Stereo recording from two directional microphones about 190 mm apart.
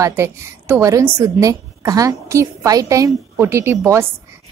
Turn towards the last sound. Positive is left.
turn(degrees=-15)  # may be behind; listen again after turning